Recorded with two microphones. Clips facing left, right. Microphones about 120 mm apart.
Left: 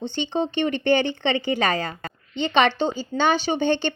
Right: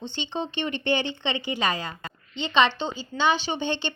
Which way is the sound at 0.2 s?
45° left (ahead or behind).